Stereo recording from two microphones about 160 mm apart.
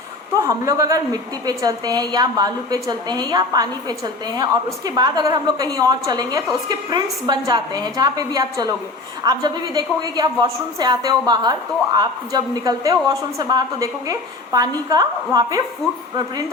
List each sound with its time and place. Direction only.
0.4 s a woman's voice: 20° right (ahead or behind)